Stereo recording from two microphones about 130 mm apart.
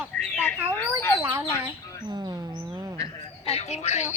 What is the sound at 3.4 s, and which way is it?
Speech, 55° left (ahead or behind).